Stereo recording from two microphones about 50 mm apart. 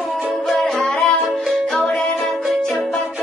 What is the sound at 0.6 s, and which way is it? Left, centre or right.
Music, centre.